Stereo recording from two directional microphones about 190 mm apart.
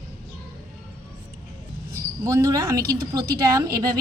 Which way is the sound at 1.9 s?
15° right (ahead or behind).